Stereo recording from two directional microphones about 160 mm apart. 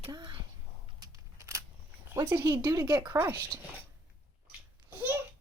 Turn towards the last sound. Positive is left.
turn(degrees=-10)  # may be behind; listen again after turning